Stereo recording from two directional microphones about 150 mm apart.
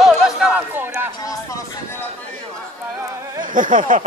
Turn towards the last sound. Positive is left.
turn(degrees=-60)  # may be behind; listen again after turning